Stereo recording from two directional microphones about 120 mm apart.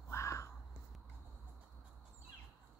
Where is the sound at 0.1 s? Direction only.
25° left (ahead or behind).